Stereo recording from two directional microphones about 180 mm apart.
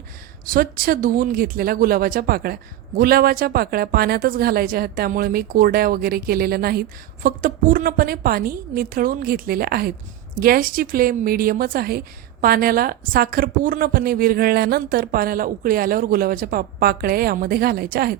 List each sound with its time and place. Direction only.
0.4 s speech: 50° right (ahead or behind)